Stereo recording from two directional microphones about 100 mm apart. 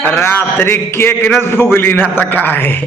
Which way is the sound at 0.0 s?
25° left (ahead or behind).